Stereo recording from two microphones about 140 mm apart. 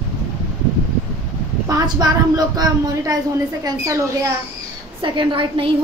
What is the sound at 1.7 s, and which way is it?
A woman's voice, 30° right (ahead or behind).